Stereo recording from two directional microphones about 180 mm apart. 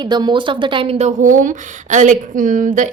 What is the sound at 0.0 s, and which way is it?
A woman's voice, 25° right (ahead or behind).